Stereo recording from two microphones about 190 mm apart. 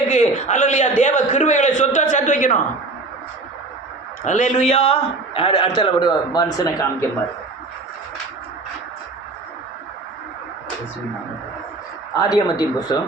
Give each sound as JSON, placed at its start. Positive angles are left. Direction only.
{"t": 0.1, "sound": "a man's voice", "side_deg": 40}
{"t": 4.2, "sound": "a man's voice", "side_deg": 40}
{"t": 12.1, "sound": "a man's voice", "side_deg": 20}